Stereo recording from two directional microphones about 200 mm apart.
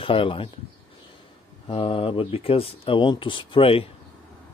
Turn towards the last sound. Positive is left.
turn(degrees=30)  # may be behind; listen again after turning